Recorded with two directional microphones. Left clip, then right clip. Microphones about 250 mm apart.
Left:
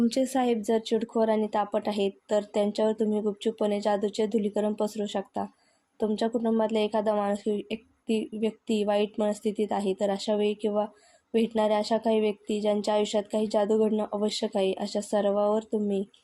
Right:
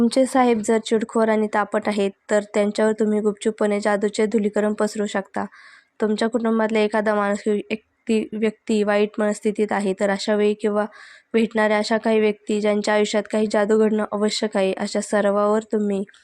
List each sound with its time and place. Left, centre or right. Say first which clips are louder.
0.0 s speech: right 8 dB; centre